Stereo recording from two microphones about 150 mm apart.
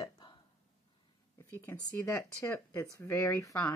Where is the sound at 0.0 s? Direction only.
30° left (ahead or behind).